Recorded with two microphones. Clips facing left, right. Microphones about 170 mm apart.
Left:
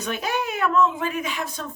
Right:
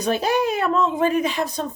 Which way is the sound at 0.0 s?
35° right (ahead or behind).